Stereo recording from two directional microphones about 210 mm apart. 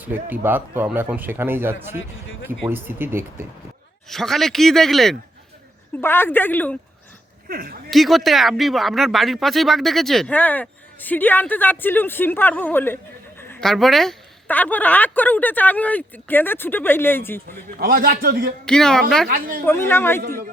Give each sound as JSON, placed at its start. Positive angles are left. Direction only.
{"t": 0.0, "sound": "a man's voice", "side_deg": -10}
{"t": 2.0, "sound": "speech", "side_deg": 65}
{"t": 2.6, "sound": "a man's voice", "side_deg": -10}
{"t": 4.1, "sound": "a woman's voice", "side_deg": 0}
{"t": 7.4, "sound": "speech", "side_deg": -45}
{"t": 7.9, "sound": "a woman's voice", "side_deg": 0}
{"t": 17.7, "sound": "a man's voice", "side_deg": -45}
{"t": 18.6, "sound": "speech", "side_deg": 5}
{"t": 19.3, "sound": "a man's voice", "side_deg": -45}
{"t": 19.6, "sound": "a woman's voice", "side_deg": 10}